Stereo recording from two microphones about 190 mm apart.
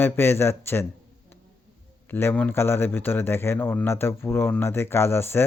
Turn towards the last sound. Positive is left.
turn(degrees=10)  # may be behind; listen again after turning